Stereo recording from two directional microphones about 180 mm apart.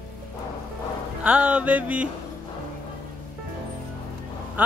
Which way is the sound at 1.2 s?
5° right (ahead or behind).